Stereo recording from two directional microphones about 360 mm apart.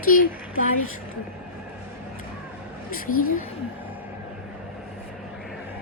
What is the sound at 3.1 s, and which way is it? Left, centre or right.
Speech, left.